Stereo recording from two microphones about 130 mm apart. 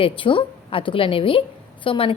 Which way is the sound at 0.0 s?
40° left (ahead or behind).